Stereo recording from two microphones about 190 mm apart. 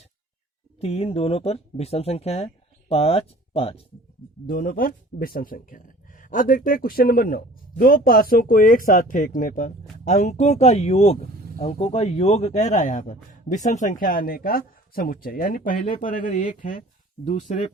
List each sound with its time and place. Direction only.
0.8 s speech: 35° left (ahead or behind)
4.4 s speech: 45° left (ahead or behind)